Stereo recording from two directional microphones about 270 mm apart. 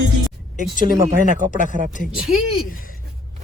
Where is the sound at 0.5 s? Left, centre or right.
Left.